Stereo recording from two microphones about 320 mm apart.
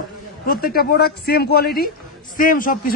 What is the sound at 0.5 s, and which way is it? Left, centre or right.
Speech, left.